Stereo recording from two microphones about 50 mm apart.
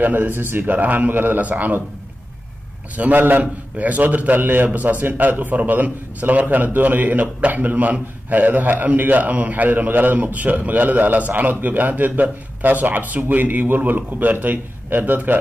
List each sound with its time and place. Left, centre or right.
0.0 s a man's voice: right
3.0 s a man's voice: right